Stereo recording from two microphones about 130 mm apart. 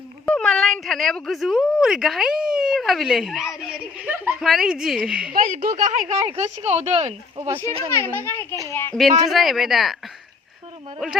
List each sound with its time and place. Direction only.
0.3 s a woman's voice: 5° left (ahead or behind); by 4.3 s 15° right (ahead or behind)
4.3 s a woman's voice: centre (ahead or behind)
5.3 s a woman's voice: 80° right; by 6.5 s 60° right (ahead or behind)
6.7 s a woman's voice: 50° right (ahead or behind)
7.9 s speech: 20° left (ahead or behind)
9.3 s a woman's voice: centre (ahead or behind)
11.0 s a woman's voice: centre (ahead or behind)